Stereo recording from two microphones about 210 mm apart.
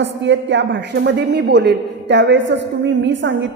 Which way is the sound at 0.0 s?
60° right (ahead or behind).